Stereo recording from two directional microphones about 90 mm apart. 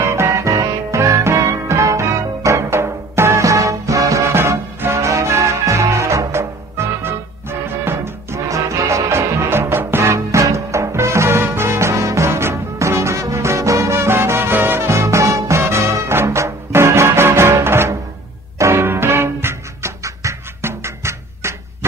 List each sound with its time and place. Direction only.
0.0 s music: 30° right (ahead or behind)
7.8 s music: 30° right (ahead or behind)